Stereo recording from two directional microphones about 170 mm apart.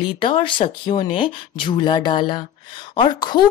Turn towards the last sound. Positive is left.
turn(degrees=25)  # may be behind; listen again after turning